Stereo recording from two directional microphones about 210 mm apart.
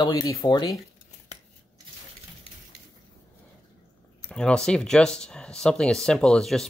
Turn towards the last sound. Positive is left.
turn(degrees=0)  # may be behind; listen again after turning